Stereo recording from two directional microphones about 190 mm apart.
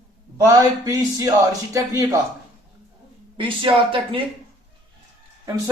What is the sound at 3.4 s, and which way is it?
Speech, 25° right (ahead or behind).